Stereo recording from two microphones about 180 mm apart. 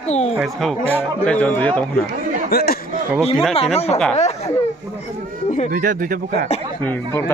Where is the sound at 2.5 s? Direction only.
60° left (ahead or behind).